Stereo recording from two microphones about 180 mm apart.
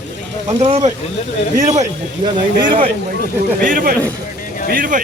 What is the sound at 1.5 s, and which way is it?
Speech, 40° right (ahead or behind).